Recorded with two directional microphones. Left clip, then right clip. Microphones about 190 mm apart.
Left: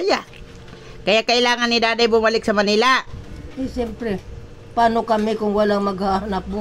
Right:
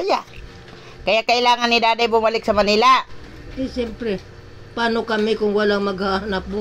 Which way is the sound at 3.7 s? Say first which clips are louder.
Even; 20° left (ahead or behind).